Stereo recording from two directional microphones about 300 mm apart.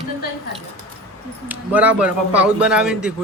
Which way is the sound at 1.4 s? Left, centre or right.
Centre.